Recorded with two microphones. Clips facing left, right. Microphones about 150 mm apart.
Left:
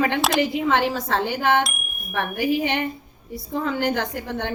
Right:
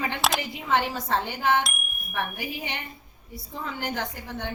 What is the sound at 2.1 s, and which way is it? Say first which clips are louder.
Wind chime: left 9 dB; 85° left.